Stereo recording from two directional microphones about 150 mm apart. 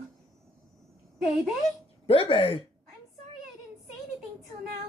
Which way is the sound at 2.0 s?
40° left (ahead or behind).